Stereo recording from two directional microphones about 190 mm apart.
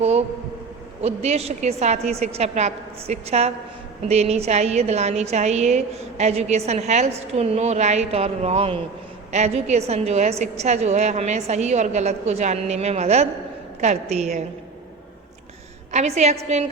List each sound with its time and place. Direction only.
0.0 s a woman's voice: 35° right (ahead or behind)
15.9 s a woman's voice: 35° right (ahead or behind)